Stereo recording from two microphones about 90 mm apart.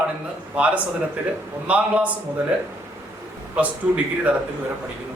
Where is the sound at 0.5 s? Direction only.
15° right (ahead or behind).